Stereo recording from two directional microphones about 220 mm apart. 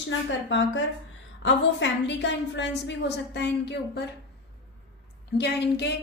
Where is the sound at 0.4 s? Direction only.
55° left (ahead or behind).